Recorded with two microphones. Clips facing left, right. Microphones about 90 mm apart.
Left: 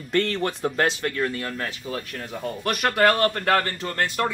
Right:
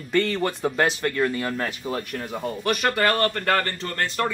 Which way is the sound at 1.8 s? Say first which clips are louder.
Right 3 dB; 35° right (ahead or behind).